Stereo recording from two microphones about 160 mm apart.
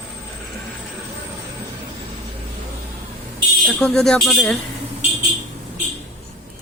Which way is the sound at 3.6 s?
5° left (ahead or behind).